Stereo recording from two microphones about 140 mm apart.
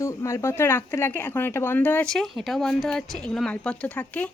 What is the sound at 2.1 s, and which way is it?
Speech, centre (ahead or behind).